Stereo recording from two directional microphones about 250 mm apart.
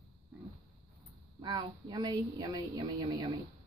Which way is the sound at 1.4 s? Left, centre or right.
Centre.